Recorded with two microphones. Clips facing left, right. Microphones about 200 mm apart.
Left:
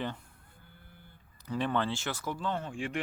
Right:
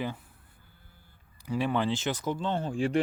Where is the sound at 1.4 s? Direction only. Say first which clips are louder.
Right 3 dB; 10° right (ahead or behind); by 3.0 s 35° right (ahead or behind).